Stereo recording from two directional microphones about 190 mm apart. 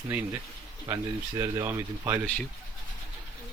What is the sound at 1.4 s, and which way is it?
Speech, 15° right (ahead or behind).